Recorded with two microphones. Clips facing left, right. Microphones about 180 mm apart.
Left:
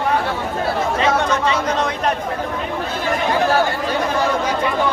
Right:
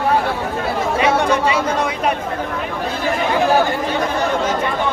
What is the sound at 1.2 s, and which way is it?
Chatter, 10° right (ahead or behind).